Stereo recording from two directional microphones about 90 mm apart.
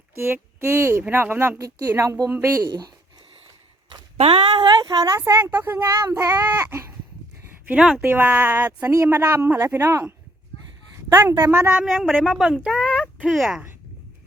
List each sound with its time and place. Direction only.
0.6 s speech: 30° right (ahead or behind)
1.5 s speech: 35° right (ahead or behind)
2.6 s speech: 50° right (ahead or behind)
4.6 s speech: 55° right (ahead or behind)
5.4 s speech: 20° right (ahead or behind)
5.7 s speech: 45° right (ahead or behind); by 6.8 s 25° right (ahead or behind)
7.8 s speech: 5° right (ahead or behind)
8.0 s speech: 15° right (ahead or behind)
8.9 s speech: 30° right (ahead or behind)
9.3 s a woman's voice: 20° right (ahead or behind)
11.8 s speech: centre (ahead or behind)
12.5 s speech: 10° right (ahead or behind)